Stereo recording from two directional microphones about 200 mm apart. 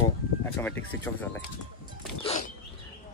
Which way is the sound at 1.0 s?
10° left (ahead or behind).